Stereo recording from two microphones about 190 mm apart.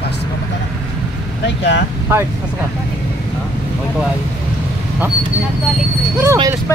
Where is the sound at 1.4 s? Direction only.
70° left (ahead or behind).